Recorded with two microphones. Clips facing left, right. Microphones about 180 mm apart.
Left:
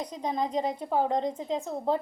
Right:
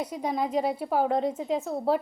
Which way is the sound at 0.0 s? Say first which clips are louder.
Right 2 dB; 10° right (ahead or behind).